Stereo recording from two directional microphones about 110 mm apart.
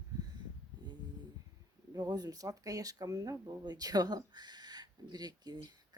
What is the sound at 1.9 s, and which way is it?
Speech, 35° right (ahead or behind).